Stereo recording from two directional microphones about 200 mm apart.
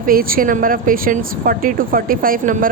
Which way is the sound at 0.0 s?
45° right (ahead or behind).